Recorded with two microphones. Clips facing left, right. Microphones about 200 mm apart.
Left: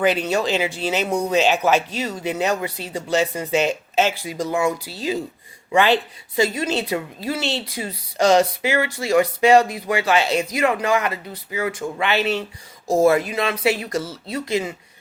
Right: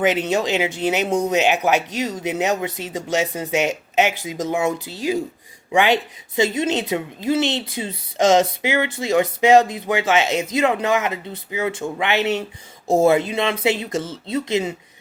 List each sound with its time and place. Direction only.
0.0 s speech: 20° right (ahead or behind)